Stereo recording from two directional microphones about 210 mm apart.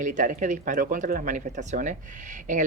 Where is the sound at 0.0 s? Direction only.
35° right (ahead or behind).